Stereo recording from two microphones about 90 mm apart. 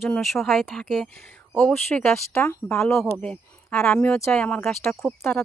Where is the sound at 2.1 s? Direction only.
30° left (ahead or behind).